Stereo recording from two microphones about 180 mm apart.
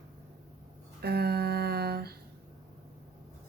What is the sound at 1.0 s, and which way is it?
A woman's voice, 60° right (ahead or behind).